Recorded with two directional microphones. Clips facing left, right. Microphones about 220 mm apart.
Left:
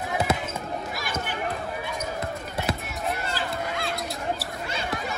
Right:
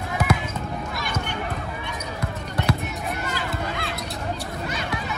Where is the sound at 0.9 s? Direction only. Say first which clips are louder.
Right 2 dB; centre (ahead or behind).